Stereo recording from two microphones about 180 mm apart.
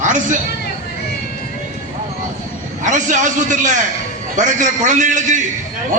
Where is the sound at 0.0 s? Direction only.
45° right (ahead or behind).